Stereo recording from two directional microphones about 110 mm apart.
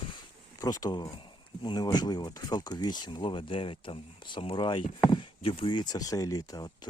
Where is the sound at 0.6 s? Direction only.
35° left (ahead or behind).